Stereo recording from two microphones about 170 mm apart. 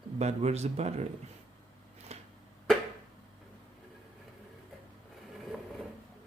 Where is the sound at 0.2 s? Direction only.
40° right (ahead or behind).